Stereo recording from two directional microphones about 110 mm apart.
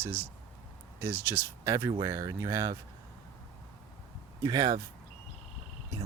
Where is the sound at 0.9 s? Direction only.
20° right (ahead or behind).